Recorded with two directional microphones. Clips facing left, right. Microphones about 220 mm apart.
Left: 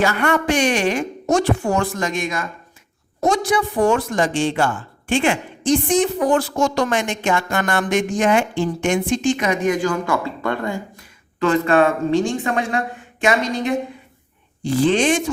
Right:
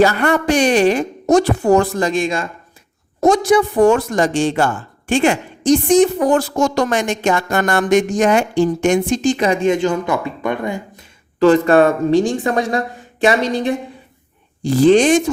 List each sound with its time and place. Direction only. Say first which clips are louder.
0.0 s speech: right 5 dB; 35° right (ahead or behind)
3.2 s speech: right 6 dB; 45° right (ahead or behind); by 11.0 s 20° right (ahead or behind)
11.3 s speech: right 5 dB; 35° right (ahead or behind)